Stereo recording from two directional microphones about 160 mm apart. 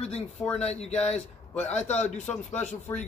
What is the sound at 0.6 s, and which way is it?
Speech, 40° left (ahead or behind).